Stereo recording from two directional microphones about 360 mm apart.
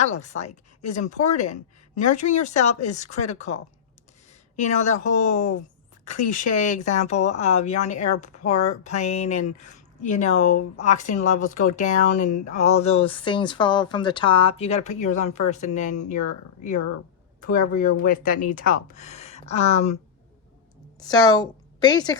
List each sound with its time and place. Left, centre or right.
0.0 s a woman's voice: centre
17.4 s speech: left
21.0 s a woman's voice: centre